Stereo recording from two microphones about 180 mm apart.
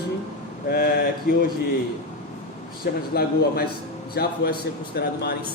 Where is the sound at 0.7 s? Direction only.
55° left (ahead or behind).